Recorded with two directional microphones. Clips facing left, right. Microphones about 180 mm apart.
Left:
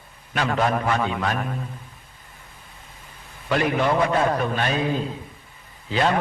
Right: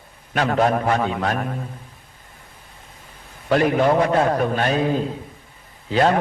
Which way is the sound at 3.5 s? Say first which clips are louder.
Right 4 dB; 40° right (ahead or behind).